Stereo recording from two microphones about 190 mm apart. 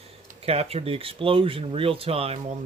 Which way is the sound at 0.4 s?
30° right (ahead or behind).